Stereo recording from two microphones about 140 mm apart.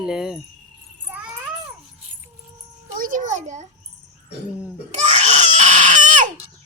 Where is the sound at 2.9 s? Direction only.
75° right (ahead or behind).